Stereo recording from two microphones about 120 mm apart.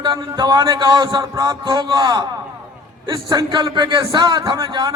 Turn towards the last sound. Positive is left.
turn(degrees=-35)  # may be behind; listen again after turning